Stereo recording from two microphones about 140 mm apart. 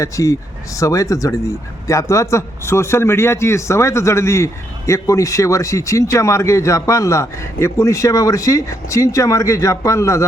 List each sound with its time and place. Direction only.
0.0 s speech: 20° left (ahead or behind)